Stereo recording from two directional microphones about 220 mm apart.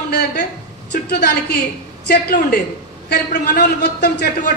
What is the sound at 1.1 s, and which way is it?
A man's voice, 45° left (ahead or behind).